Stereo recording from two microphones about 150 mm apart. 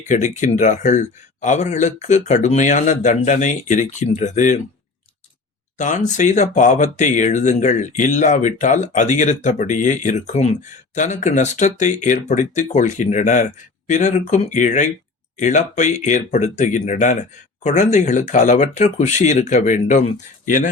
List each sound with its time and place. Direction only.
0.1 s speech: 55° left (ahead or behind)
5.7 s speech: 55° left (ahead or behind)